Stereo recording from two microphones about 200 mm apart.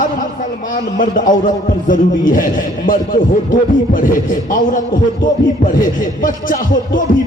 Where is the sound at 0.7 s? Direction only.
45° left (ahead or behind).